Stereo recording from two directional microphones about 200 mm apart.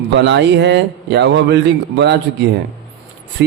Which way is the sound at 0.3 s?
60° right (ahead or behind).